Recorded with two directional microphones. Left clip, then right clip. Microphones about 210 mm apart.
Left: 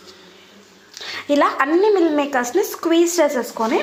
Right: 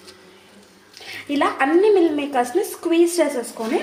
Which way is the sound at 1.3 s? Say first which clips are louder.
Left 2 dB; 15° left (ahead or behind).